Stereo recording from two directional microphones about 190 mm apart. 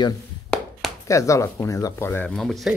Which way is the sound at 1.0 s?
15° left (ahead or behind).